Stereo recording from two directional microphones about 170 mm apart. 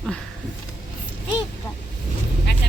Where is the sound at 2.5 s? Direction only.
90° left.